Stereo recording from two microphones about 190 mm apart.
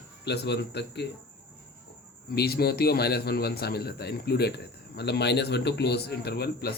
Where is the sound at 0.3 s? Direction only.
60° left (ahead or behind).